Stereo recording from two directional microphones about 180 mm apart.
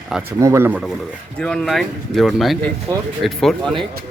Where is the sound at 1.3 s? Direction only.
5° left (ahead or behind).